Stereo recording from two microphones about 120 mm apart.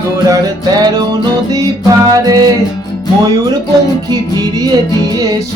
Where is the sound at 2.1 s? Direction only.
30° right (ahead or behind).